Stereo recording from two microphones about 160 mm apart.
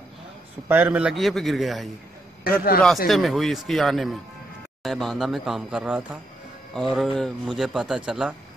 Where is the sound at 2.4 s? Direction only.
70° left (ahead or behind).